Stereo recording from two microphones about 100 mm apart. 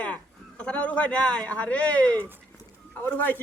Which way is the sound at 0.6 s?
15° left (ahead or behind).